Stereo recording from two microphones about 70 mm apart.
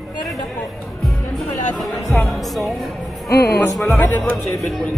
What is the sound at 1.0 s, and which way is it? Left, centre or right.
Speech, centre.